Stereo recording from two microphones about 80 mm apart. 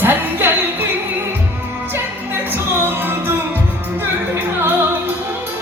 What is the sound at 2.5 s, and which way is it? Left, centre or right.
Music, right.